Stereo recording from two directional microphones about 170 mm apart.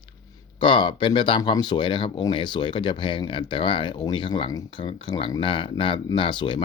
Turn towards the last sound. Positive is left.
turn(degrees=30)  # may be behind; listen again after turning